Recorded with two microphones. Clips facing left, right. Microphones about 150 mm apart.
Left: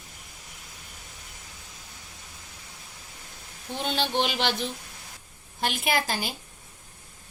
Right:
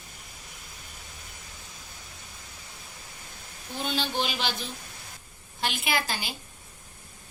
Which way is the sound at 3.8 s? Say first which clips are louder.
Left 2 dB; 65° left (ahead or behind).